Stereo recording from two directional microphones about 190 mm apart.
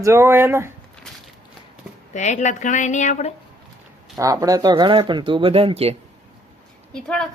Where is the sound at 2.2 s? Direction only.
40° left (ahead or behind).